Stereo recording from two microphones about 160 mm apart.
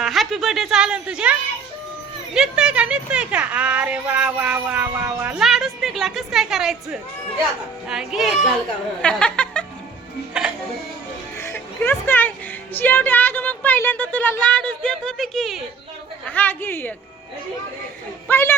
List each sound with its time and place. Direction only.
0.0 s a woman's voice: centre (ahead or behind)
5.4 s a woman's voice: centre (ahead or behind)
10.3 s a woman's voice: 5° right (ahead or behind)
11.3 s music: 15° left (ahead or behind)
12.7 s speech: 10° left (ahead or behind)
18.3 s speech: 15° left (ahead or behind)